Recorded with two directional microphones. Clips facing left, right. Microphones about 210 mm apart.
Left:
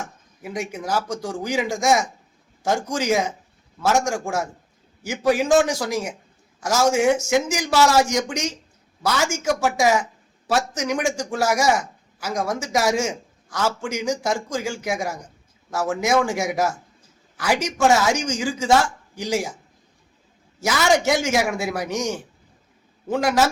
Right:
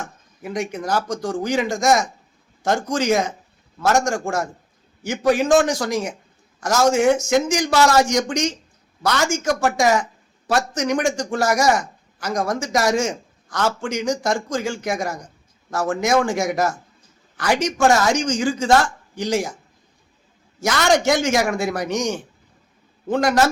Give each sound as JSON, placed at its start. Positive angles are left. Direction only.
{"t": 0.0, "sound": "a woman's voice", "side_deg": 5}
{"t": 20.6, "sound": "a woman's voice", "side_deg": 5}